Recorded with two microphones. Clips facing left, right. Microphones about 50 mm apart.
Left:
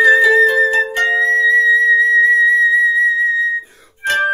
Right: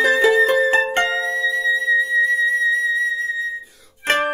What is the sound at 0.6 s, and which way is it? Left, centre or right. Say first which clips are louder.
Music: left 2 dB; right.